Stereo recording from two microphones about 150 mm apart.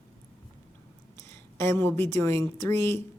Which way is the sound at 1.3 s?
15° left (ahead or behind).